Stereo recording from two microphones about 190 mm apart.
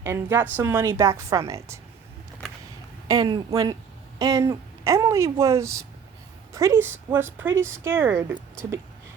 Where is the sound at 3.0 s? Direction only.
20° right (ahead or behind).